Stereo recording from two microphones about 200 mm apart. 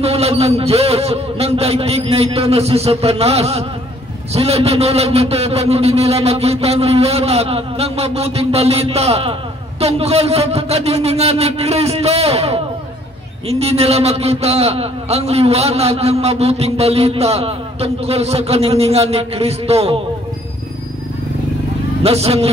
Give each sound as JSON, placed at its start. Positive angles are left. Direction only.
{"t": 0.0, "sound": "a man's voice", "side_deg": -30}
{"t": 22.0, "sound": "a man's voice", "side_deg": -30}